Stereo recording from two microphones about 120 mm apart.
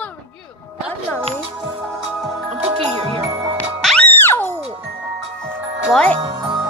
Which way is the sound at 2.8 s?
55° right (ahead or behind).